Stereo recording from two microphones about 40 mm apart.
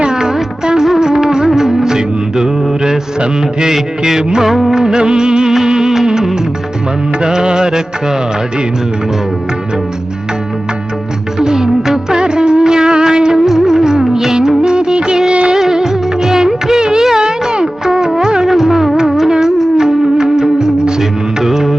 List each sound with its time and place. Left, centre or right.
0.0 s music: centre
7.2 s music: right
11.3 s music of bollywood: centre
13.4 s music: centre
14.6 s music of bollywood: right
15.5 s music of bollywood: centre
18.2 s music: centre